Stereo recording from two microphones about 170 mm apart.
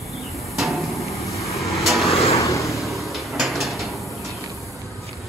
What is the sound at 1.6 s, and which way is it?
Vehicle, centre (ahead or behind).